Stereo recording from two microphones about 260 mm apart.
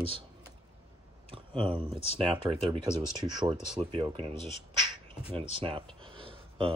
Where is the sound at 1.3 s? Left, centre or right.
Right.